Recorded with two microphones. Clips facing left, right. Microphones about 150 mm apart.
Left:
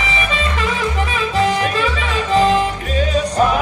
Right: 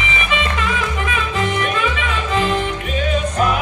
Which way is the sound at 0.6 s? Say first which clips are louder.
Left 2 dB; 35° left (ahead or behind).